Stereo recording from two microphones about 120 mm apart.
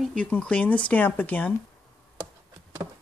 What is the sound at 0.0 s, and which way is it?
Speech, 10° left (ahead or behind).